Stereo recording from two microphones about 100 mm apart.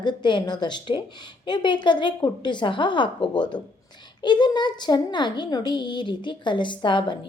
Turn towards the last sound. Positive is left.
turn(degrees=50)  # may be behind; listen again after turning